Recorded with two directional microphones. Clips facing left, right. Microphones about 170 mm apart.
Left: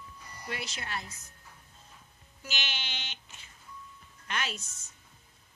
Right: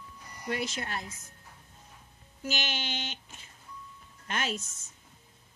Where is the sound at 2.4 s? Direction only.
45° right (ahead or behind).